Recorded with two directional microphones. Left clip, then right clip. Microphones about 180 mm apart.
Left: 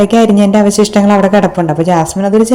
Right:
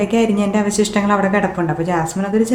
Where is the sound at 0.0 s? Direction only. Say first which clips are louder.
Left 8 dB; 30° left (ahead or behind).